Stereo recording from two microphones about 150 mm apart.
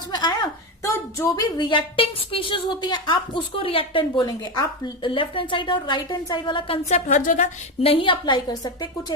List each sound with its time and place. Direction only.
0.1 s a woman's voice: 30° left (ahead or behind)
6.8 s speech: 50° left (ahead or behind)
7.8 s a woman's voice: 40° left (ahead or behind)